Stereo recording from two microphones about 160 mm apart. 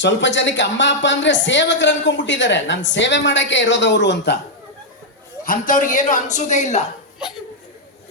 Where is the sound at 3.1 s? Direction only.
90° left.